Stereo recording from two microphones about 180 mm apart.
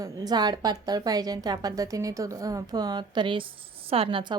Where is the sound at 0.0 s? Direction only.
20° right (ahead or behind).